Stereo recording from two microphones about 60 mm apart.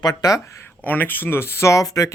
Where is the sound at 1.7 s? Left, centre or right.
Left.